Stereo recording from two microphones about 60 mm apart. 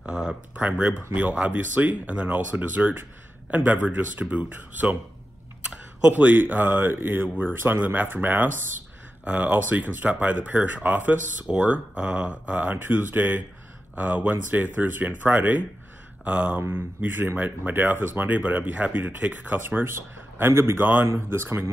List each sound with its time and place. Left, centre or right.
0.0 s a sound: centre
1.1 s speech: right
5.7 s typing: centre
6.1 s speech: right
11.4 s speech: centre; by 20.8 s right
20.8 s speech: right